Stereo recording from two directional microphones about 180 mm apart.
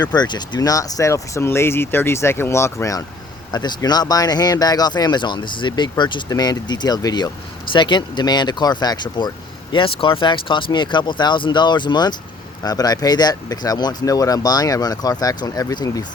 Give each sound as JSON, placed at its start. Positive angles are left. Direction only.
{"t": 0.0, "sound": "speech", "side_deg": 25}